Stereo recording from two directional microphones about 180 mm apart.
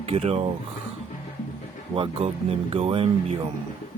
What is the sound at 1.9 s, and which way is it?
Speech, 30° right (ahead or behind).